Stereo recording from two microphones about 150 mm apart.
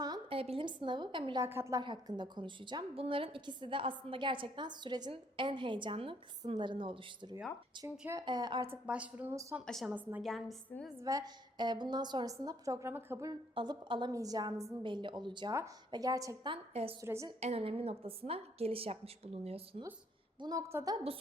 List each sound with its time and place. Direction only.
0.0 s a sound: 25° right (ahead or behind)
0.3 s a woman's voice: 40° right (ahead or behind)
1.5 s a woman's voice: 15° right (ahead or behind)
1.8 s a woman's voice: 30° right (ahead or behind)
8.6 s a woman's voice: 10° right (ahead or behind)
9.3 s a woman's voice: 20° right (ahead or behind)
9.6 s a woman's voice: centre (ahead or behind)
9.9 s a woman's voice: 10° right (ahead or behind)
11.0 s a woman's voice: 25° right (ahead or behind)
13.6 s a woman's voice: 35° right (ahead or behind)
16.5 s a woman's voice: 40° right (ahead or behind)
17.0 s a woman's voice: 20° right (ahead or behind)
17.4 s a woman's voice: 40° right (ahead or behind)
20.4 s a woman's voice: 25° right (ahead or behind)